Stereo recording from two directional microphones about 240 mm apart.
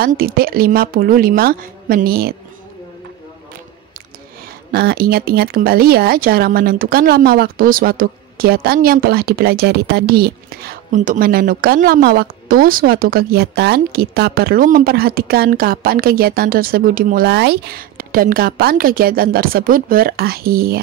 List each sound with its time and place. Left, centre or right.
0.0 s speech: right
4.7 s speech: right